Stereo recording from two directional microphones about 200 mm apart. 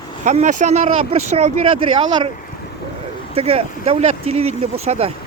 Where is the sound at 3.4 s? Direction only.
30° right (ahead or behind).